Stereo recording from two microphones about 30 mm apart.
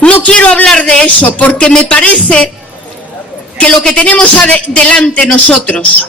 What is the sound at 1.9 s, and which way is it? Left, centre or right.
Speech, left.